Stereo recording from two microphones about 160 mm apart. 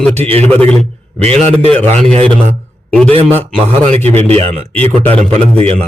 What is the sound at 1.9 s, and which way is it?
Speech, 40° right (ahead or behind).